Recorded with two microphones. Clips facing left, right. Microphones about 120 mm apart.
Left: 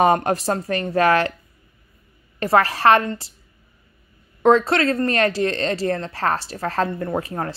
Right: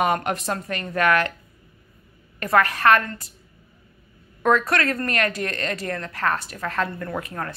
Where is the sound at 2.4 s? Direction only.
30° left (ahead or behind).